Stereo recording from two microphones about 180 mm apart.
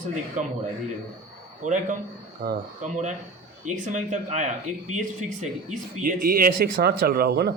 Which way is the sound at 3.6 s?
45° right (ahead or behind).